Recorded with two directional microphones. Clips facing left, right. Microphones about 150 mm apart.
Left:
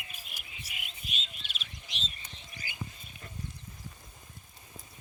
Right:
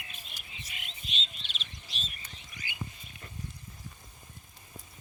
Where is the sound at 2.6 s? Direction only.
40° left (ahead or behind).